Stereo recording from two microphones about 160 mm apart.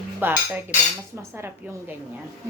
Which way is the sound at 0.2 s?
10° right (ahead or behind).